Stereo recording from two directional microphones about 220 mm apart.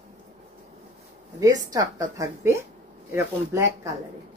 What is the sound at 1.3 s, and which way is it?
Speech, 15° right (ahead or behind).